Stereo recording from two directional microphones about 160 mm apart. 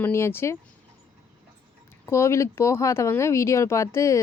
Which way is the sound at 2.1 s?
15° left (ahead or behind).